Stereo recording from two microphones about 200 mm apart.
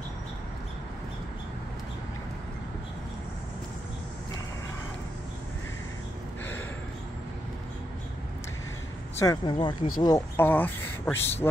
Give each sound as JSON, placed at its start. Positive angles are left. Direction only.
{"t": 9.1, "sound": "speech", "side_deg": 15}